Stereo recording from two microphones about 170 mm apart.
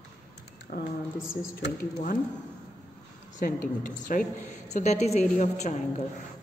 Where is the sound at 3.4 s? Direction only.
50° left (ahead or behind).